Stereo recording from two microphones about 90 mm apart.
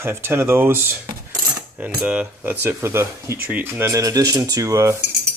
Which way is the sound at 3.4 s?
20° right (ahead or behind).